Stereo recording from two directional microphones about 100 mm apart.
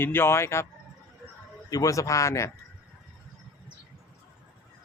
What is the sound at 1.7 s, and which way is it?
Speech, 35° left (ahead or behind).